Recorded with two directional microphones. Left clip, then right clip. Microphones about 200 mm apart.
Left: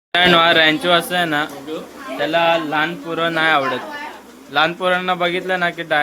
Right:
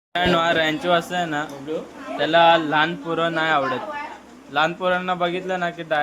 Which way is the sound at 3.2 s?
Centre (ahead or behind).